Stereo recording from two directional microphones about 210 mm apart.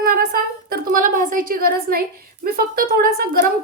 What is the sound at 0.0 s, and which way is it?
A woman's voice, 45° right (ahead or behind).